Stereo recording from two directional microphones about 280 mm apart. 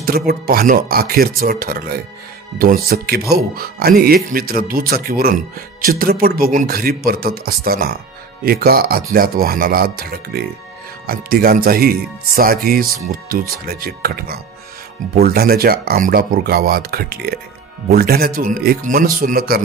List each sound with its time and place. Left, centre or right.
0.0 s speech: right